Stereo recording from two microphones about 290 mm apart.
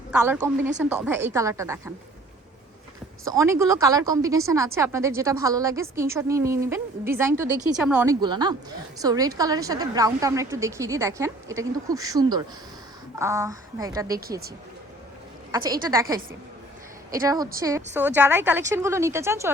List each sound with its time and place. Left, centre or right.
0.8 s a woman's voice: centre
3.2 s a woman's voice: centre
14.2 s speech: right
15.5 s a woman's voice: centre
17.2 s a woman's voice: centre